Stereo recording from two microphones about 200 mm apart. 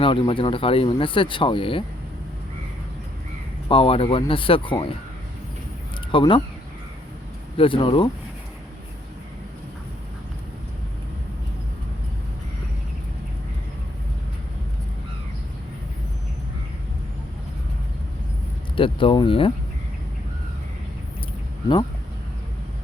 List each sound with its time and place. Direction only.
0.0 s speech: 25° left (ahead or behind)
3.7 s speech: 25° left (ahead or behind)
6.1 s speech: 25° left (ahead or behind)
7.5 s speech: 25° left (ahead or behind)
18.8 s speech: 25° left (ahead or behind)